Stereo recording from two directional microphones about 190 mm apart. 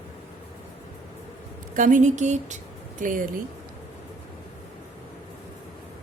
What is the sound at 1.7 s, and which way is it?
A woman's voice, 45° right (ahead or behind).